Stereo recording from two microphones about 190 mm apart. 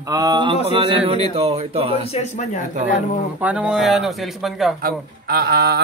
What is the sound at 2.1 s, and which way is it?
Speech, 35° left (ahead or behind).